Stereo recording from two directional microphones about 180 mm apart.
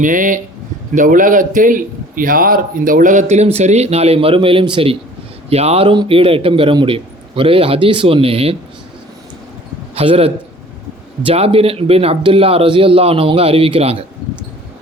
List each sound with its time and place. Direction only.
0.0 s a man's voice: 45° right (ahead or behind)
9.9 s a man's voice: 30° right (ahead or behind)